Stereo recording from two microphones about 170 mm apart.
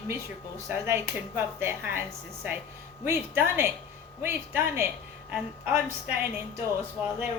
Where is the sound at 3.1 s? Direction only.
15° right (ahead or behind).